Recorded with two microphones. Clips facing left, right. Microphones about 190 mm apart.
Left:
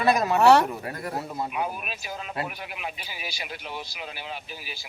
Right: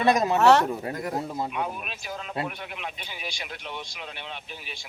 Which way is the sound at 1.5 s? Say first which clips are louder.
Left 1 dB; 5° left (ahead or behind).